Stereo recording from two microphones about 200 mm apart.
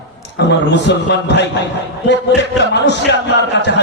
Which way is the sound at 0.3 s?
60° left (ahead or behind).